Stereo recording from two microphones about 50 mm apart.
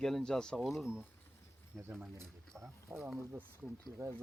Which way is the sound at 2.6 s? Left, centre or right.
Right.